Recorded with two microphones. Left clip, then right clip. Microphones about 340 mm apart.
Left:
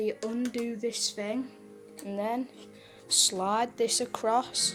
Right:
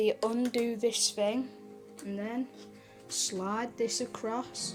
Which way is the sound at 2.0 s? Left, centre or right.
Centre.